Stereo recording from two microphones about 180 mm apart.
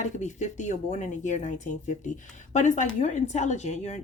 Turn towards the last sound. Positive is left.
turn(degrees=40)  # may be behind; listen again after turning